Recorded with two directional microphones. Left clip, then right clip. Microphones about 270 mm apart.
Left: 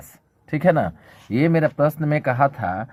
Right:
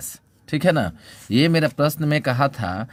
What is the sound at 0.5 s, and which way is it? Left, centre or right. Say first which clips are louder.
Speech: left 1 dB; right.